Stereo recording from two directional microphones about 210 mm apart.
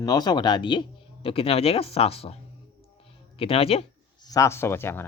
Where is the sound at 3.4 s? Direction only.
25° left (ahead or behind); by 5.1 s 10° left (ahead or behind).